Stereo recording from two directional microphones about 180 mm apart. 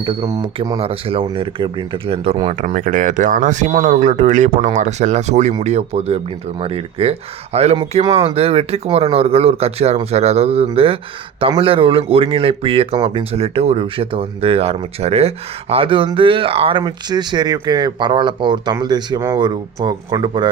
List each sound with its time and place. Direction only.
0.0 s speech: 25° right (ahead or behind)
0.8 s speech: 30° right (ahead or behind)